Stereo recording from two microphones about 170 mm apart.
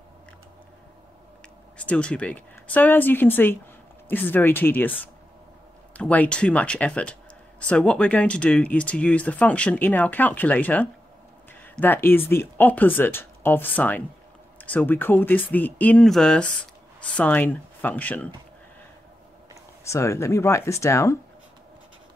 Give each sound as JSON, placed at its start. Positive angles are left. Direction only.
{"t": 1.8, "sound": "speech", "side_deg": 5}
{"t": 5.9, "sound": "speech", "side_deg": 5}
{"t": 19.8, "sound": "speech", "side_deg": 15}